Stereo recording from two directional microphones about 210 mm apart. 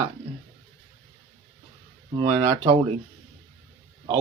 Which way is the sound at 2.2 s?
20° right (ahead or behind).